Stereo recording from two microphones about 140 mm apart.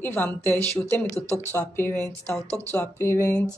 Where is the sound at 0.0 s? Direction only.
15° left (ahead or behind).